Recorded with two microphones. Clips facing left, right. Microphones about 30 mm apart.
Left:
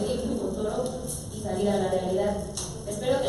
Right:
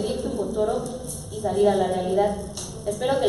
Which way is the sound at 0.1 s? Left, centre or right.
Centre.